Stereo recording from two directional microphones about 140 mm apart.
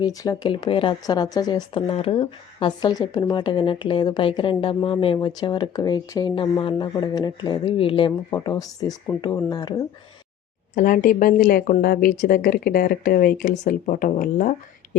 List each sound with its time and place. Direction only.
0.0 s speech: 25° left (ahead or behind)
1.9 s speech: 45° left (ahead or behind)
8.3 s speech: 25° left (ahead or behind)
10.8 s speech: 75° left (ahead or behind)